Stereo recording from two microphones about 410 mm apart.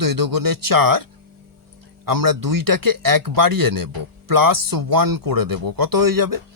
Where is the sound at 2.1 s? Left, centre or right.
Right.